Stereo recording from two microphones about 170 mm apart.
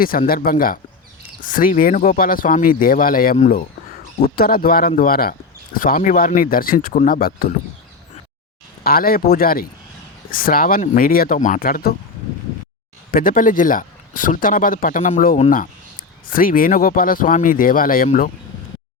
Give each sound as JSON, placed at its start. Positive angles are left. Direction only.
{"t": 0.3, "sound": "speech", "side_deg": 60}
{"t": 4.4, "sound": "speech", "side_deg": 60}
{"t": 8.8, "sound": "speech", "side_deg": 60}
{"t": 13.1, "sound": "speech", "side_deg": 55}